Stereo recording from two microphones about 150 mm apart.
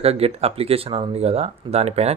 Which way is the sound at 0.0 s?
40° right (ahead or behind).